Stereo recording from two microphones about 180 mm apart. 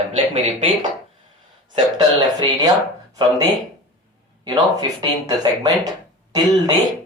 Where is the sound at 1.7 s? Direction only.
25° right (ahead or behind).